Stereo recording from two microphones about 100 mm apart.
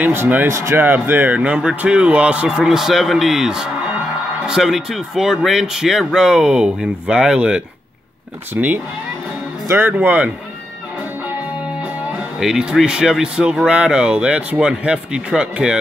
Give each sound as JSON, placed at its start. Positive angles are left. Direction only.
{"t": 0.0, "sound": "a man's voice", "side_deg": -20}
{"t": 12.4, "sound": "a man's voice", "side_deg": -5}